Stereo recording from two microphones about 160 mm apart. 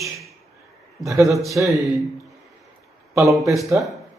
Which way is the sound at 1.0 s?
20° right (ahead or behind).